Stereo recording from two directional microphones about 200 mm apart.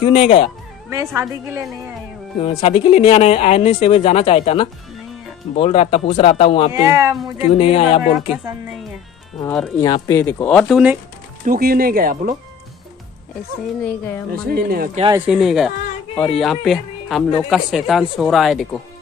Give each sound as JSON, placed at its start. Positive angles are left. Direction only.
{"t": 0.0, "sound": "speech", "side_deg": 30}
{"t": 0.8, "sound": "speech", "side_deg": -15}
{"t": 2.4, "sound": "speech", "side_deg": 30}
{"t": 6.7, "sound": "speech", "side_deg": -15}
{"t": 7.5, "sound": "speech", "side_deg": 35}
{"t": 9.4, "sound": "speech", "side_deg": 5}
{"t": 9.8, "sound": "speech", "side_deg": 20}
{"t": 10.1, "sound": "speech", "side_deg": 10}
{"t": 11.4, "sound": "speech", "side_deg": -45}
{"t": 13.8, "sound": "speech", "side_deg": 10}
{"t": 14.3, "sound": "speech", "side_deg": -50}
{"t": 15.2, "sound": "speech", "side_deg": 0}